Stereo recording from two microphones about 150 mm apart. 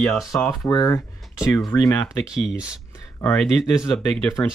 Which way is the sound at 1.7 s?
15° left (ahead or behind).